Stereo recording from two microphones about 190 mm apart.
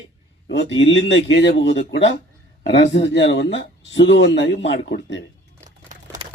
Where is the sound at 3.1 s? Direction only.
70° left (ahead or behind).